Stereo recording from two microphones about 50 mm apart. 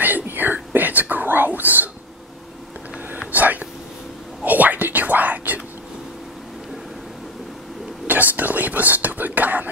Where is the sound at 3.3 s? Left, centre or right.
Right.